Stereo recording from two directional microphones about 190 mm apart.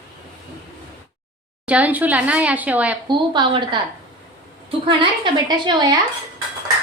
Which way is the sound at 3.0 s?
25° right (ahead or behind).